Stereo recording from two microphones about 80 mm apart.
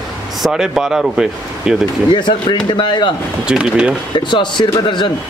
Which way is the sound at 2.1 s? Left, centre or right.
Left.